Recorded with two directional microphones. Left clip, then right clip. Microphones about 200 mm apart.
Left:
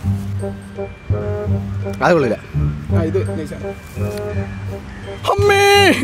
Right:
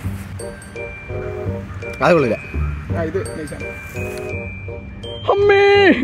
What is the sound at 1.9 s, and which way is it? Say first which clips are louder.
Speech: even; 10° left (ahead or behind).